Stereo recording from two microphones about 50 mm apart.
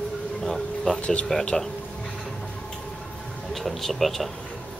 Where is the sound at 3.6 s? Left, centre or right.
Centre.